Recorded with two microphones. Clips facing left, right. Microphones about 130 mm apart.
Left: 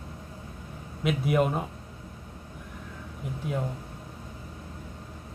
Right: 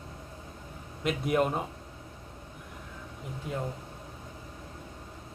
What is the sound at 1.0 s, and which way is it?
Speech, centre (ahead or behind).